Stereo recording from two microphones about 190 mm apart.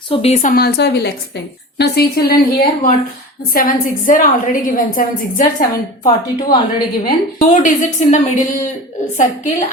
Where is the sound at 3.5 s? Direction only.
50° left (ahead or behind).